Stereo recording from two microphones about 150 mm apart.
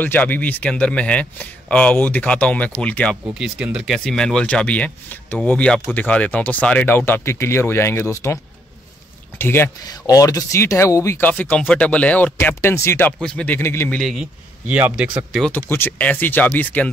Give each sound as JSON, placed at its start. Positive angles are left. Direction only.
{"t": 0.0, "sound": "speech", "side_deg": 10}
{"t": 3.3, "sound": "speech", "side_deg": -5}
{"t": 9.4, "sound": "speech", "side_deg": 15}
{"t": 13.2, "sound": "speech", "side_deg": 5}
{"t": 13.9, "sound": "speech", "side_deg": 0}
{"t": 15.5, "sound": "speech", "side_deg": 10}